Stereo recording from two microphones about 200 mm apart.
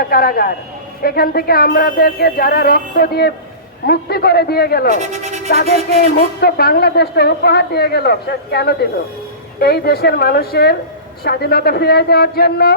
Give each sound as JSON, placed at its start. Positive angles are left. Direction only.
{"t": 0.0, "sound": "a woman's voice", "side_deg": 50}
{"t": 4.9, "sound": "speech", "side_deg": -35}
{"t": 5.5, "sound": "a woman's voice", "side_deg": 50}